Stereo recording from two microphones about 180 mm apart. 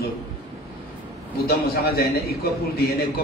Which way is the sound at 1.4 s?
55° left (ahead or behind).